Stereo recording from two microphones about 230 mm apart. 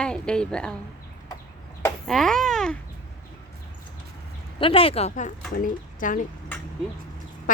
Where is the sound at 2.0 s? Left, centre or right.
Centre.